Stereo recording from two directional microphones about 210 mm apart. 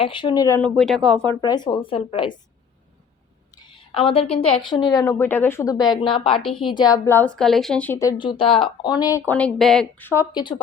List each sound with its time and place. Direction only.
0.0 s a woman's voice: 25° left (ahead or behind)
0.8 s speech: centre (ahead or behind)
1.4 s a woman's voice: 20° left (ahead or behind)
3.5 s a woman's voice: 20° left (ahead or behind)